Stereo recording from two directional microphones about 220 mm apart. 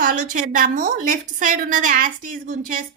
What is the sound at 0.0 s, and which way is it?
A woman's voice, 35° right (ahead or behind).